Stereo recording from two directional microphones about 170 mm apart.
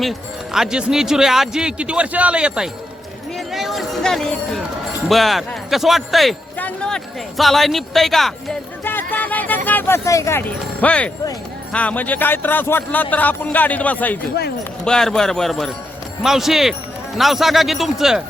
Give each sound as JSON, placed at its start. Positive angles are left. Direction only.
{"t": 0.0, "sound": "speech", "side_deg": 0}
{"t": 3.3, "sound": "a sound", "side_deg": 0}
{"t": 5.0, "sound": "speech", "side_deg": 0}
{"t": 8.8, "sound": "music", "side_deg": 10}
{"t": 9.6, "sound": "speech", "side_deg": 10}